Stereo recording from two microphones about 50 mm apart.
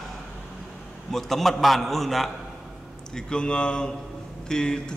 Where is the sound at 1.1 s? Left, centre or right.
Centre.